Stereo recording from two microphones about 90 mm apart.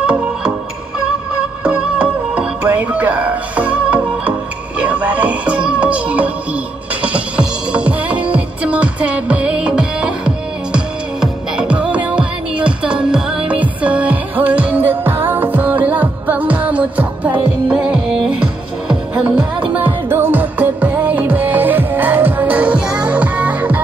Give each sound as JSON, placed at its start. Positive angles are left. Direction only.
{"t": 0.0, "sound": "music", "side_deg": -10}
{"t": 1.6, "sound": "music", "side_deg": -15}